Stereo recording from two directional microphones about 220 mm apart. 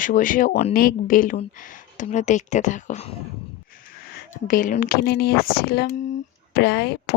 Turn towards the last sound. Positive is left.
turn(degrees=50)  # may be behind; listen again after turning